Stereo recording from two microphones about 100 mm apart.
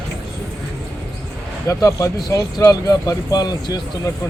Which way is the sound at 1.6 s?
30° left (ahead or behind).